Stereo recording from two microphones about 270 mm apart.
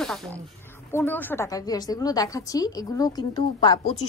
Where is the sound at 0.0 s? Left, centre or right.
Centre.